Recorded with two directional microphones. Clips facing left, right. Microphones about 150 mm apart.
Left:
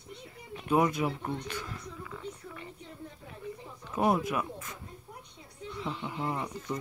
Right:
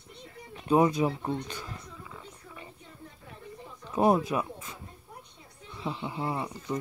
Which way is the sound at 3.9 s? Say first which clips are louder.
Right 4 dB; 30° right (ahead or behind).